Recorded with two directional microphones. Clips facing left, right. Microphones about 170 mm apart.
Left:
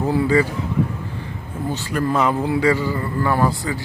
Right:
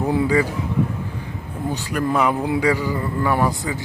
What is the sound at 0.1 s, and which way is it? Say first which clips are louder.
Speech: left 1 dB; 15° right (ahead or behind).